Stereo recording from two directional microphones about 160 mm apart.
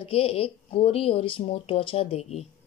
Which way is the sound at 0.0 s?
35° left (ahead or behind).